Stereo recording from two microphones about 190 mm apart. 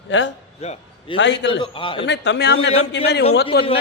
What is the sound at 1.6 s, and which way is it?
Speech, 25° left (ahead or behind).